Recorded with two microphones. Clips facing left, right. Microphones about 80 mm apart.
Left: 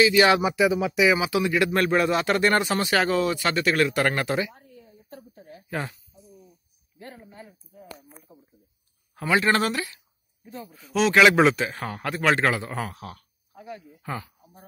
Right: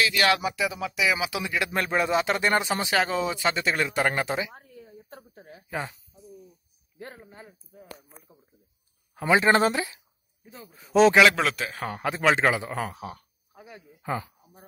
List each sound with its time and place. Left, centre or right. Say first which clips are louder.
0.0 s speech: left 5 dB; centre
4.8 s a sound: left 1 dB; right
5.7 s speech: left 1 dB; centre
7.0 s a man's voice: even; right
9.2 s speech: right 2 dB; right
10.9 s a man's voice: right 5 dB; right
11.5 s speech: left 3 dB; centre
11.9 s speech: right 1 dB; centre